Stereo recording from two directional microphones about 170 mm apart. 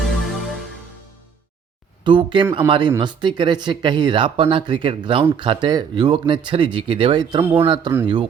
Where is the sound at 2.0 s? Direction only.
30° right (ahead or behind).